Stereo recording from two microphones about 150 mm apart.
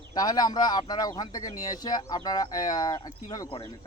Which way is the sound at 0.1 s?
25° left (ahead or behind).